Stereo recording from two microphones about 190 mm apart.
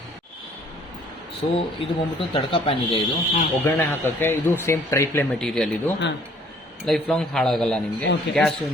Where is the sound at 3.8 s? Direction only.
10° left (ahead or behind).